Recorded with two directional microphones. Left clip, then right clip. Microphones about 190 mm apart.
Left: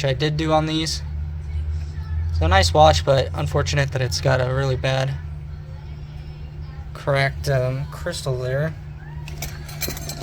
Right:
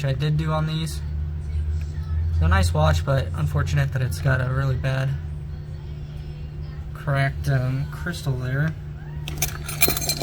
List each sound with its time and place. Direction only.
0.0 s speech: 45° left (ahead or behind)
2.4 s speech: 40° left (ahead or behind)
7.0 s speech: 55° left (ahead or behind)